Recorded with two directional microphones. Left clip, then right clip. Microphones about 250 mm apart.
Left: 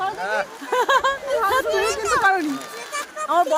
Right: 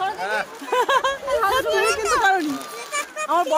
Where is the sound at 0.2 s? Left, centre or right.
Centre.